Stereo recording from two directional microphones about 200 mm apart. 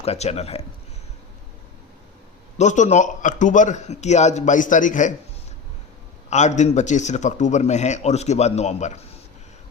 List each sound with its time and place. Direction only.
0.0 s speech: 30° left (ahead or behind)
2.6 s speech: 35° left (ahead or behind)
6.3 s speech: 35° left (ahead or behind)